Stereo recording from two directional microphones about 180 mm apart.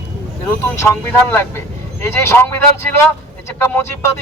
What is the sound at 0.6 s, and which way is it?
Speech, 15° left (ahead or behind).